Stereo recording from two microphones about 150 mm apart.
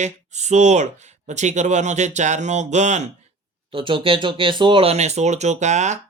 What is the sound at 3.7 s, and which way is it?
Speech, 35° right (ahead or behind).